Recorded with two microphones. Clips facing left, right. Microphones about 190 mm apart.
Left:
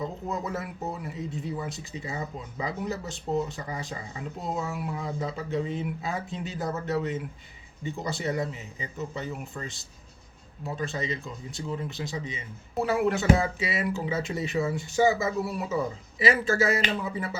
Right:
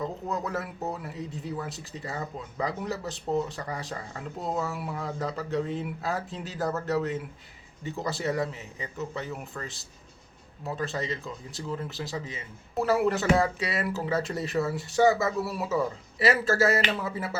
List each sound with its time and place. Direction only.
0.0 s speech: centre (ahead or behind)